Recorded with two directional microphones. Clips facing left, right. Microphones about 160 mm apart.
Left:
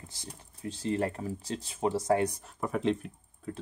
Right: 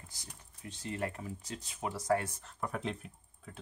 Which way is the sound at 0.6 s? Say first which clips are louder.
Left 8 dB; 30° left (ahead or behind).